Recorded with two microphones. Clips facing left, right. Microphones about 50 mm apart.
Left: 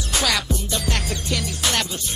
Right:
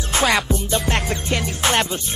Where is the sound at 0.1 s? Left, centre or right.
Right.